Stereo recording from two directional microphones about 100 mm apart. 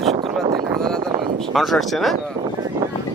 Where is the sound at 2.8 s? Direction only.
35° right (ahead or behind).